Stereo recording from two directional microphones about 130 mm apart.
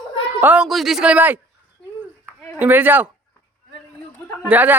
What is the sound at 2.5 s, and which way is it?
Speech, 15° right (ahead or behind).